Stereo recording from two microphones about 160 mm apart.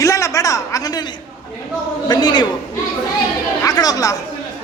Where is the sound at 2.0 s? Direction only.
25° left (ahead or behind).